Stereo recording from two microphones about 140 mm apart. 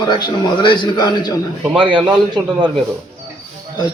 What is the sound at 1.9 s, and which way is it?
Speech, 35° right (ahead or behind).